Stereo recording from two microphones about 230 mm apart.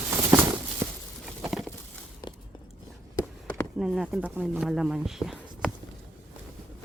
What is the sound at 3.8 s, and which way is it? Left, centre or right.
Speech, centre.